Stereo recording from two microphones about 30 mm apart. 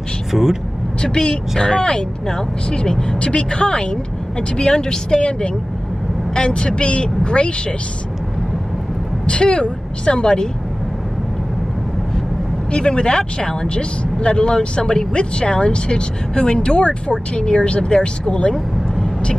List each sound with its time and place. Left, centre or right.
0.3 s speech: centre
1.0 s speech: left
6.3 s speech: left
9.2 s speech: left
12.7 s speech: left